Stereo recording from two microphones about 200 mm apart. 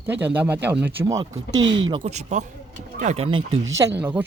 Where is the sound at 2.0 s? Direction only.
35° right (ahead or behind).